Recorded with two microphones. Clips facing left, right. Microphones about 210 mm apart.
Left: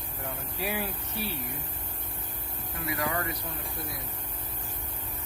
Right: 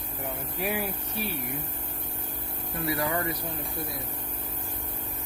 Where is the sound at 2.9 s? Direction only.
30° right (ahead or behind).